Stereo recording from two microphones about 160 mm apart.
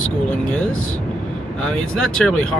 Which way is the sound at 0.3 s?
5° left (ahead or behind).